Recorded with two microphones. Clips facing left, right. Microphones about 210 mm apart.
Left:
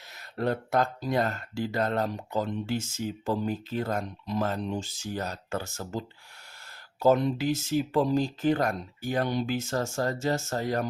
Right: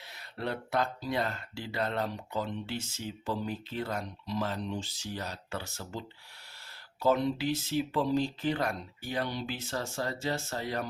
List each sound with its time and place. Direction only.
0.1 s speech: 45° left (ahead or behind)